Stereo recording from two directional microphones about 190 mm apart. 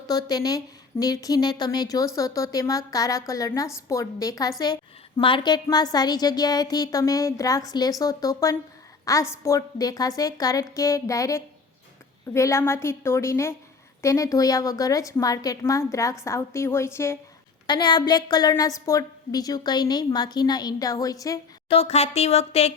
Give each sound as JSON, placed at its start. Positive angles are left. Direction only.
{"t": 0.1, "sound": "a woman's voice", "side_deg": 20}
{"t": 21.7, "sound": "speech", "side_deg": 30}